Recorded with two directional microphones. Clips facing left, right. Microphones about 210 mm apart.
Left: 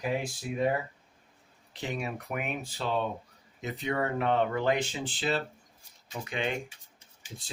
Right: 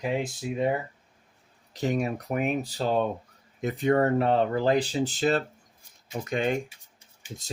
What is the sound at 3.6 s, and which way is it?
Speech, 50° right (ahead or behind).